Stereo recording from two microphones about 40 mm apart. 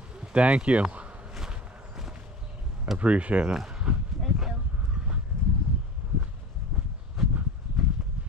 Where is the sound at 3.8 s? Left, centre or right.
Right.